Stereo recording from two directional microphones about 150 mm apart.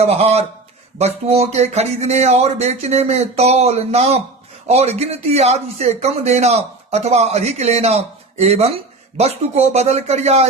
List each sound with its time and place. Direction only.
0.0 s speech: 45° right (ahead or behind)